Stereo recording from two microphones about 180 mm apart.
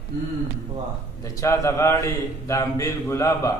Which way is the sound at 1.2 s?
15° left (ahead or behind).